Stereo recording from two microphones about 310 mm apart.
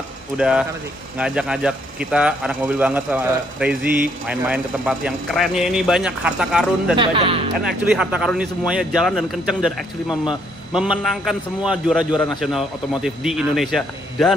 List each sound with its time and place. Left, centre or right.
0.4 s a man's voice: centre
7.0 s speech: centre
8.0 s a man's voice: centre